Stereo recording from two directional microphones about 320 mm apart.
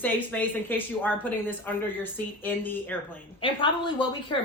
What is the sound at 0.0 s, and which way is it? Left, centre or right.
Speech, centre.